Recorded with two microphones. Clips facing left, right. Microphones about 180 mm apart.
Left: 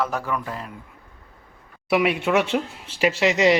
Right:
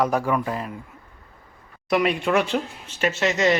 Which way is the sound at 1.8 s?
5° left (ahead or behind).